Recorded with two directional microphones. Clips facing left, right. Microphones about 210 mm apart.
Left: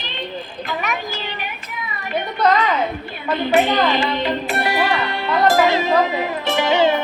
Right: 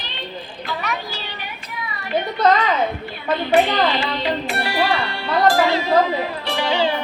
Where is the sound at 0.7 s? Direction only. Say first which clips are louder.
Left 1 dB; 15° left (ahead or behind).